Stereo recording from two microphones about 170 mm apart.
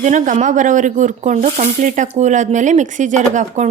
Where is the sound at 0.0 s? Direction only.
45° right (ahead or behind).